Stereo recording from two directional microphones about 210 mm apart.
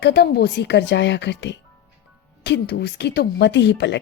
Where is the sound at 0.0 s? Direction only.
50° left (ahead or behind).